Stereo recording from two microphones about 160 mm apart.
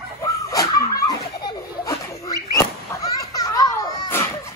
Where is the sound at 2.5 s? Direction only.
20° left (ahead or behind).